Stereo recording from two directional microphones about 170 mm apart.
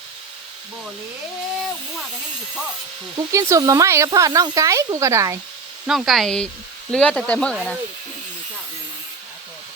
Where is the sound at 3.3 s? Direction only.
20° right (ahead or behind).